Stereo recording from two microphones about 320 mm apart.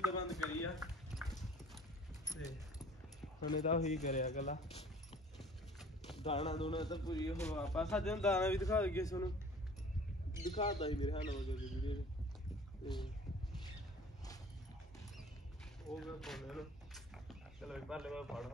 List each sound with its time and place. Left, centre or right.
0.3 s clip-clop: centre
2.3 s keys jangling: centre
3.4 s a man's voice: left
5.4 s clip-clop: centre
6.2 s speech: centre
10.4 s speech: centre
16.0 s speech: centre